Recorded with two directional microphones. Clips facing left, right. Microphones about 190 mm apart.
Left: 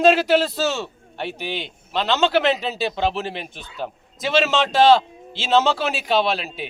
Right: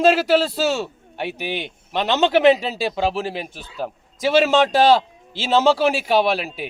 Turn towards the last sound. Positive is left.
turn(degrees=-10)  # may be behind; listen again after turning